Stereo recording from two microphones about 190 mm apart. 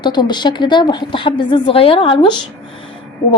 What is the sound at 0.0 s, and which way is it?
A woman's voice, 25° left (ahead or behind).